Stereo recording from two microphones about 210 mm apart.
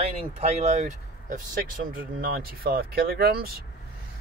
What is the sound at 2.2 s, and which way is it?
Speech, 45° right (ahead or behind).